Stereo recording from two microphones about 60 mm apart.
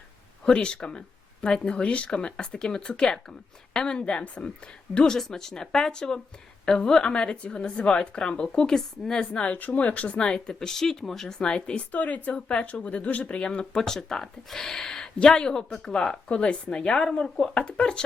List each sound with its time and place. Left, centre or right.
0.4 s speech: centre
11.3 s speech: centre
11.9 s speech: left